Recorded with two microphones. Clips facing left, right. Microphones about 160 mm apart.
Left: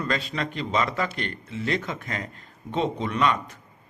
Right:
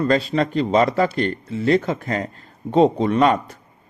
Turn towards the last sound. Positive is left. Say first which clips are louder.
# right 7 dB
turn(degrees=-40)  # may be behind; listen again after turning